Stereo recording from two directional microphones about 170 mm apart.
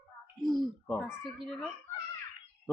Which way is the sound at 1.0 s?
5° right (ahead or behind).